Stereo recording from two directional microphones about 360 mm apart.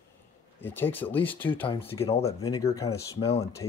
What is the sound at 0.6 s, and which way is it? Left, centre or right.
Speech, centre.